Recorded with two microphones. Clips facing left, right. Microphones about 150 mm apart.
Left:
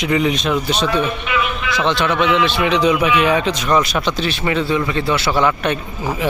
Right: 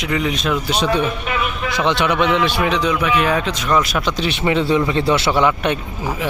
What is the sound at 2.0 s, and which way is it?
Speech, 15° right (ahead or behind).